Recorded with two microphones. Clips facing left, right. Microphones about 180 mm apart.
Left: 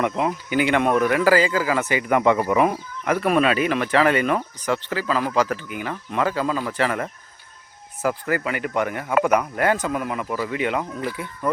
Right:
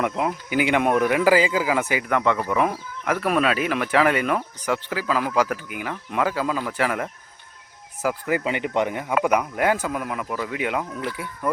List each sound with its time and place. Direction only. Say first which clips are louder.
0.0 s speech: left 1 dB; centre (ahead or behind)
2.0 s speech: left 7 dB; 10° left (ahead or behind); by 7.1 s 5° right (ahead or behind)
8.3 s speech: right 1 dB; 20° right (ahead or behind)
9.1 s speech: left 2 dB; 5° right (ahead or behind)